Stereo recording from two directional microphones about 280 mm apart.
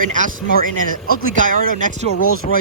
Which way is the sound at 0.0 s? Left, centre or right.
Right.